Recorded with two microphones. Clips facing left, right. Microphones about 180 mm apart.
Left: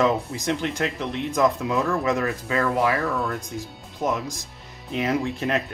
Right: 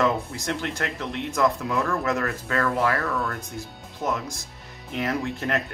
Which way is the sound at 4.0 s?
20° left (ahead or behind).